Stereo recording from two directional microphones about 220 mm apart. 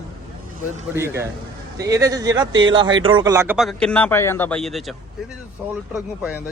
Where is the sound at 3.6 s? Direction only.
Centre (ahead or behind).